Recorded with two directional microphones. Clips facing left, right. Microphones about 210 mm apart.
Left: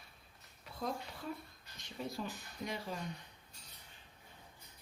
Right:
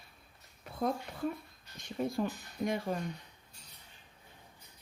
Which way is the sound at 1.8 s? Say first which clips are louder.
Right 9 dB; 50° right (ahead or behind).